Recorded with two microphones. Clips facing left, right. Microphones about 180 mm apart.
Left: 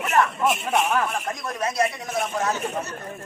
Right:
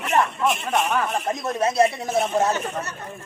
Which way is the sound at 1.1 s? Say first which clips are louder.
Right 4 dB; 25° right (ahead or behind).